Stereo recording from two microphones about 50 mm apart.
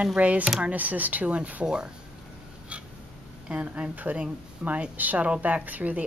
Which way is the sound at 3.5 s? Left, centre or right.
Right.